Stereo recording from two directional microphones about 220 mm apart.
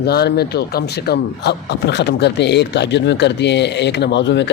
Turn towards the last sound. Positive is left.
turn(degrees=55)  # may be behind; listen again after turning